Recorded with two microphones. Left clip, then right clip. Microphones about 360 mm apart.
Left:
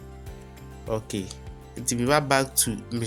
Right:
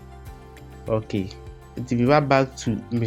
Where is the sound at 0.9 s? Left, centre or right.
Left.